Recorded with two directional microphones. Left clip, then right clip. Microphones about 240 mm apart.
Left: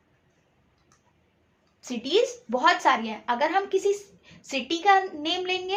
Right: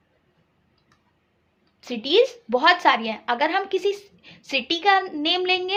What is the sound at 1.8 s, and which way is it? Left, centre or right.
A woman's voice, right.